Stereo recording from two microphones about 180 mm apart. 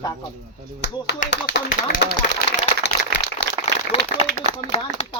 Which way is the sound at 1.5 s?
80° left.